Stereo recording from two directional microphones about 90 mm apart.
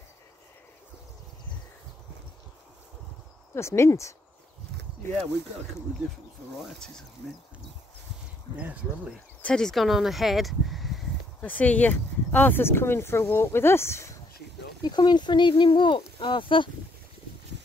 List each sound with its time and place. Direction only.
3.5 s speech: 30° left (ahead or behind)
9.4 s speech: 10° left (ahead or behind)
11.4 s speech: 15° left (ahead or behind)
14.8 s speech: 55° left (ahead or behind); by 16.6 s 70° left (ahead or behind)